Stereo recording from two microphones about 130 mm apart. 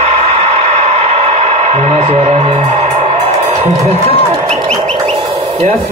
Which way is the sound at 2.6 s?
65° right (ahead or behind).